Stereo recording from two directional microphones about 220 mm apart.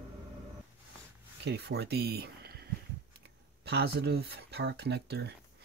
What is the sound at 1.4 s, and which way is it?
Speech, 50° right (ahead or behind).